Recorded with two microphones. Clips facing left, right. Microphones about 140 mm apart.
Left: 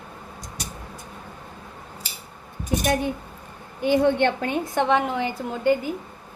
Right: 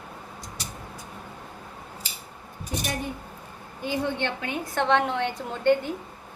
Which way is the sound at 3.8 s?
60° left (ahead or behind).